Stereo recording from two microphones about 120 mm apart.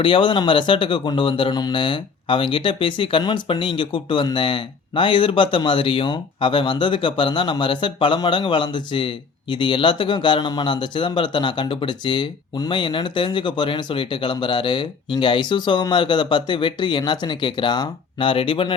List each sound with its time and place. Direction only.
0.0 s speech: 45° left (ahead or behind)